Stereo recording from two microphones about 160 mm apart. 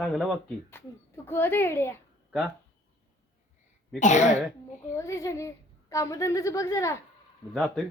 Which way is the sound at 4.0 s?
50° left (ahead or behind).